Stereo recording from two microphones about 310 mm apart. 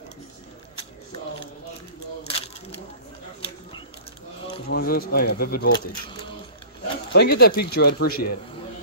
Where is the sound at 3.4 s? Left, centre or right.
Centre.